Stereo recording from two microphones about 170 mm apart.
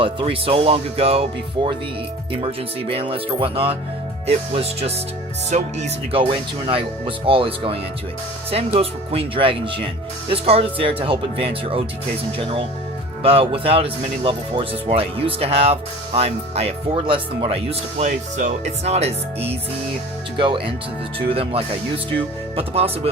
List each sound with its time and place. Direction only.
0.0 s speech: 30° right (ahead or behind)
2.9 s speech: 35° right (ahead or behind)